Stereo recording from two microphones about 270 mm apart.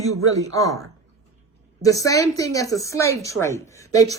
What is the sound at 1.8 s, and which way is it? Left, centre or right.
Speech, centre.